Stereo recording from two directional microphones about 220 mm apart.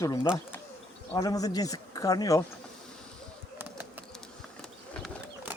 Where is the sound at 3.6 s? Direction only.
10° right (ahead or behind).